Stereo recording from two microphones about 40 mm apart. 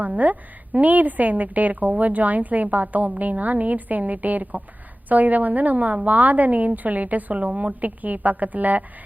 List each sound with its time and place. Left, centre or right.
0.2 s a woman's voice: right